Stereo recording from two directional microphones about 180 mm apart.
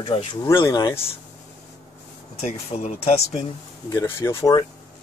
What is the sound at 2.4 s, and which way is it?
Speech, 35° left (ahead or behind).